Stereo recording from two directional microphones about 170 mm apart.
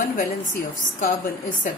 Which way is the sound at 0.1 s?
60° left (ahead or behind).